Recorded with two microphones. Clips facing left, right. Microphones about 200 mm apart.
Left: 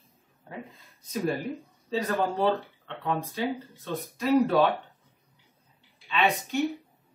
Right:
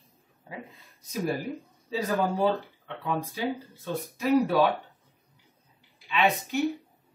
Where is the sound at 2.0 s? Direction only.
10° right (ahead or behind).